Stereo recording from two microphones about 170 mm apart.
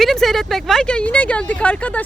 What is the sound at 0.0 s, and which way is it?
Speech, centre (ahead or behind).